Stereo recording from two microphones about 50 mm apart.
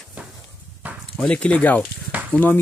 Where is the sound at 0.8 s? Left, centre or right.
Right.